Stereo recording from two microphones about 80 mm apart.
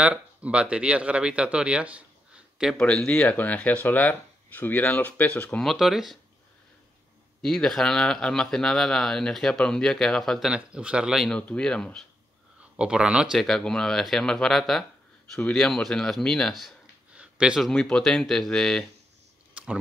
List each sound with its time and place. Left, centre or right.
0.0 s speech: centre
2.7 s speech: centre
5.7 s speech: centre
7.4 s speech: centre
10.5 s a man's voice: centre
11.2 s speech: centre
12.7 s a man's voice: centre
13.4 s speech: centre
17.1 s a sound: centre
17.6 s speech: centre
19.5 s a sound: centre